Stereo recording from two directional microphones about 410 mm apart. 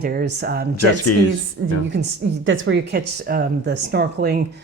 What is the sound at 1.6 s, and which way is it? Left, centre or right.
Speech, right.